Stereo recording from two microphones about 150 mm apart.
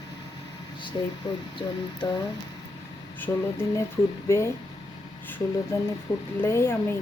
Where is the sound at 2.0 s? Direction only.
30° left (ahead or behind).